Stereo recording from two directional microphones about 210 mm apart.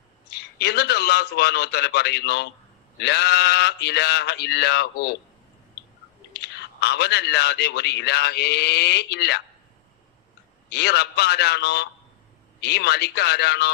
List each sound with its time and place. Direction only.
0.3 s a man's voice: 50° left (ahead or behind)
6.4 s a man's voice: 50° left (ahead or behind)
10.7 s a man's voice: 50° left (ahead or behind)